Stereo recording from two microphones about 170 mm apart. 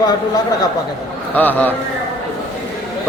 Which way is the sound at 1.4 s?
10° left (ahead or behind).